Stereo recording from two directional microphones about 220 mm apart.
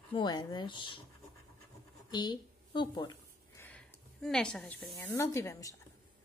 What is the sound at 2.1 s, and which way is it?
A woman's voice, 20° left (ahead or behind).